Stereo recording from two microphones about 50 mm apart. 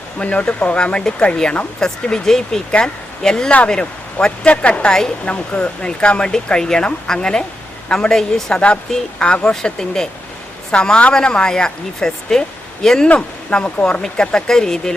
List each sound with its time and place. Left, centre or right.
0.2 s speech: left
4.9 s speech: centre
5.2 s speech: left
9.1 s speech: left